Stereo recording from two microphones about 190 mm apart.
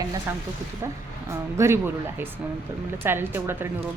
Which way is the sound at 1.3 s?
15° right (ahead or behind).